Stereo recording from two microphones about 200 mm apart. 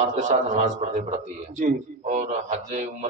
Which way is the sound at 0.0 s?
35° right (ahead or behind).